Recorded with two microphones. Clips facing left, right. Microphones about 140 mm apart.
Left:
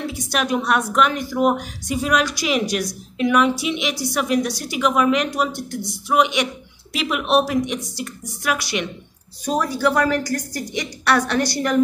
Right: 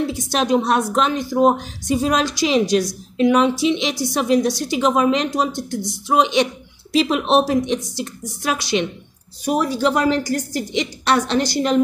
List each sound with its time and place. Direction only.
0.1 s a woman's voice: 25° right (ahead or behind)